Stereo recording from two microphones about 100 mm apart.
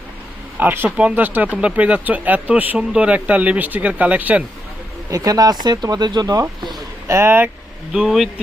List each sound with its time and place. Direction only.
0.6 s speech: 20° right (ahead or behind)
5.1 s speech: 35° right (ahead or behind)
7.1 s speech: 25° right (ahead or behind)
7.9 s speech: 5° right (ahead or behind)